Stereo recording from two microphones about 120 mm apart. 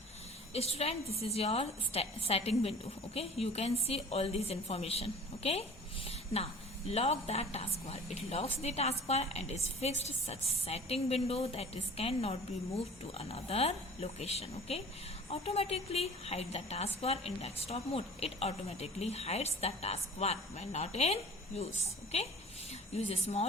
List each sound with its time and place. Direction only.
0.5 s a woman's voice: 60° left (ahead or behind)